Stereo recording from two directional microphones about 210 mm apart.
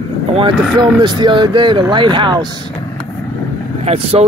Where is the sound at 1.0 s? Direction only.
20° right (ahead or behind).